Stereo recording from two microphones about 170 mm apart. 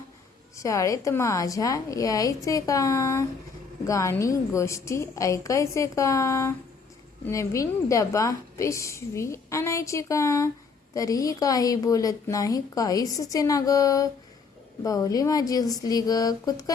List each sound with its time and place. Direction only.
0.5 s a woman's voice: 20° left (ahead or behind)